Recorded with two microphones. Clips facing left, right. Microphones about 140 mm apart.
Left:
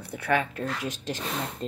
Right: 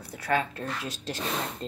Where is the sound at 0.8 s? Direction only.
15° left (ahead or behind).